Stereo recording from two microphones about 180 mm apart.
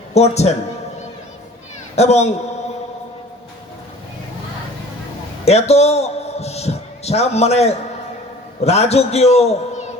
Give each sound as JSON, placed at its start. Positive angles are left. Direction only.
{"t": 0.1, "sound": "a man's voice", "side_deg": 35}
{"t": 2.0, "sound": "a man's voice", "side_deg": 40}
{"t": 5.5, "sound": "a man's voice", "side_deg": 35}